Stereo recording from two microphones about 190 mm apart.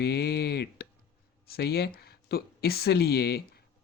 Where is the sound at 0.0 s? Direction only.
55° left (ahead or behind).